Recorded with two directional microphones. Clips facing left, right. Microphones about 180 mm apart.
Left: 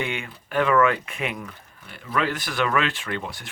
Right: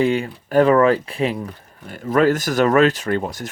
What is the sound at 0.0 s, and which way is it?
Speech, 35° right (ahead or behind).